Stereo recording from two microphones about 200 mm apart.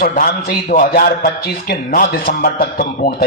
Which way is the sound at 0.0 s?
45° left (ahead or behind).